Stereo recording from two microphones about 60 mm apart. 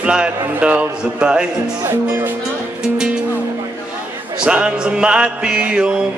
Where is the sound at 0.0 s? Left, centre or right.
Centre.